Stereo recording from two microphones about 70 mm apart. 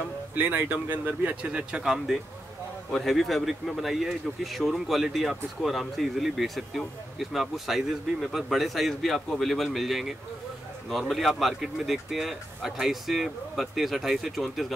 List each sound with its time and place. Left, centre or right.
0.3 s speech: right; by 14.7 s centre